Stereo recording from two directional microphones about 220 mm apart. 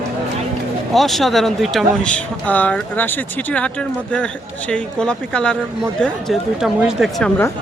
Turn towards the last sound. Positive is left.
turn(degrees=0)  # may be behind; listen again after turning